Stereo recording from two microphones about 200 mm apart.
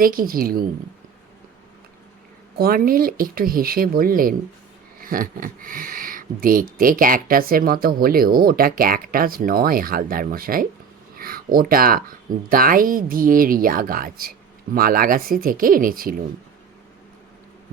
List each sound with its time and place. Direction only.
0.0 s speech: 45° right (ahead or behind)
2.6 s speech: 45° right (ahead or behind)